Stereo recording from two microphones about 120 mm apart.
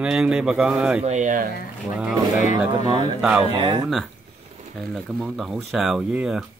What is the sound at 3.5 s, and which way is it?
Speech, 50° right (ahead or behind).